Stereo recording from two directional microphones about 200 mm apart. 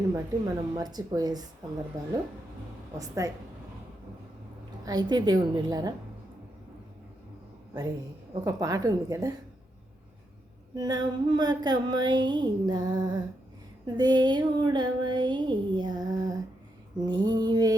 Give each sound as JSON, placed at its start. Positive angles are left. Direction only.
{"t": 0.1, "sound": "female singing", "side_deg": -20}
{"t": 2.0, "sound": "speech", "side_deg": -15}
{"t": 4.9, "sound": "female singing", "side_deg": -20}
{"t": 8.4, "sound": "speech", "side_deg": -15}
{"t": 10.8, "sound": "female singing", "side_deg": -20}